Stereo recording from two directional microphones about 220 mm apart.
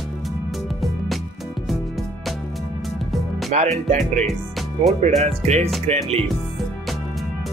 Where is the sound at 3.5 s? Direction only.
30° right (ahead or behind).